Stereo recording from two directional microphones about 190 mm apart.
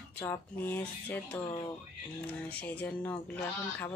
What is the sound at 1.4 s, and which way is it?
Speech, 25° left (ahead or behind).